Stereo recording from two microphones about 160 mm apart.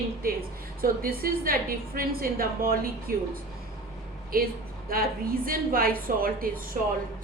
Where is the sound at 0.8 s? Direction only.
65° right (ahead or behind).